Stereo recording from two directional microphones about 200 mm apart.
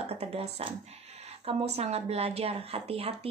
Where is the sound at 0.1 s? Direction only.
30° right (ahead or behind).